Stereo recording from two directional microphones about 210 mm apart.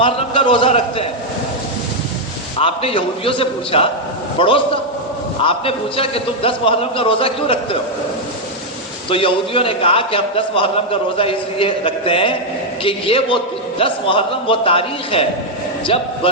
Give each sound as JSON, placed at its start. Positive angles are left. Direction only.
{"t": 0.0, "sound": "a man's voice", "side_deg": 25}
{"t": 2.6, "sound": "a man's voice", "side_deg": 25}
{"t": 9.0, "sound": "a man's voice", "side_deg": 25}